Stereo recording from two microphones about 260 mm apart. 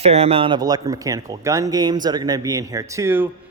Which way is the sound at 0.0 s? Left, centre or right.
Right.